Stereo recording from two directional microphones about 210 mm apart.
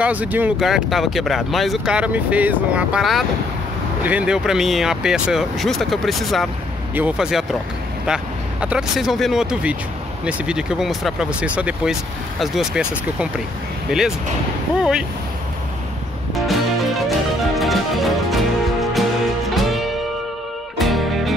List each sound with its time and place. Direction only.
0.0 s speech: 5° right (ahead or behind)
16.3 s music: centre (ahead or behind)